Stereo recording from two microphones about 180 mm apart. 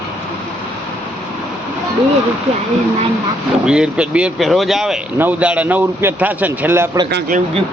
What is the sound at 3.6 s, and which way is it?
Speech, 5° right (ahead or behind).